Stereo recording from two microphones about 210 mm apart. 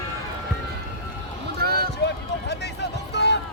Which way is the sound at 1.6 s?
45° right (ahead or behind).